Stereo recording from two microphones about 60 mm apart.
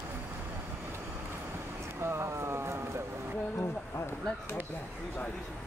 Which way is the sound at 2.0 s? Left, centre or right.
Right.